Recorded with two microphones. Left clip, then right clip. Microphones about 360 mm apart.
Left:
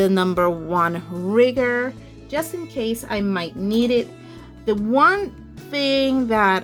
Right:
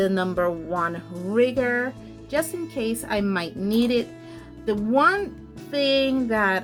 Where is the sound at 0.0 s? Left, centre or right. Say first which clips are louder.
Left 4 dB; centre.